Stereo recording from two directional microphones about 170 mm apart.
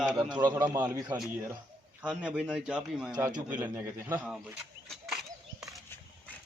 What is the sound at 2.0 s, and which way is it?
A man's voice, 5° right (ahead or behind).